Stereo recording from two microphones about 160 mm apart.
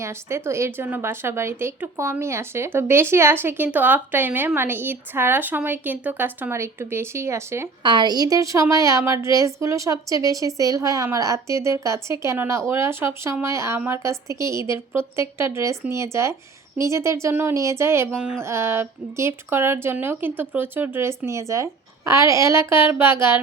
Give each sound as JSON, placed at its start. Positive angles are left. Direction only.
{"t": 0.0, "sound": "a woman's voice", "side_deg": -15}